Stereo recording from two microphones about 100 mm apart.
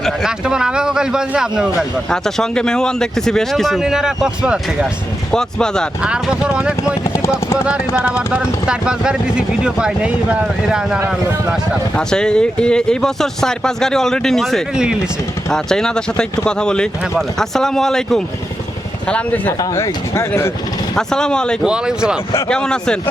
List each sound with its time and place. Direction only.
0.0 s speech: 5° right (ahead or behind)
2.0 s speech: 5° left (ahead or behind)
5.3 s speech: 5° left (ahead or behind)
6.0 s speech: 10° right (ahead or behind)
11.9 s speech: 10° left (ahead or behind)
19.5 s speech: 30° left (ahead or behind)
20.9 s speech: 5° left (ahead or behind)
21.6 s speech: 5° right (ahead or behind)
22.4 s speech: 10° left (ahead or behind)